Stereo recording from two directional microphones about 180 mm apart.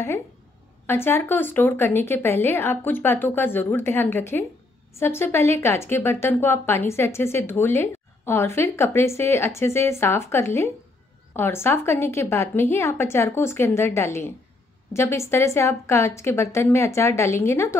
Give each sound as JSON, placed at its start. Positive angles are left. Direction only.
{"t": 0.8, "sound": "a woman's voice", "side_deg": 15}